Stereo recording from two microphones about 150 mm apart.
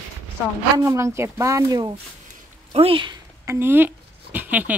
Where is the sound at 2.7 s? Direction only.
35° right (ahead or behind).